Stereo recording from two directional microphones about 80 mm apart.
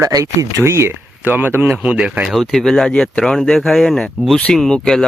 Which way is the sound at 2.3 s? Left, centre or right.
Centre.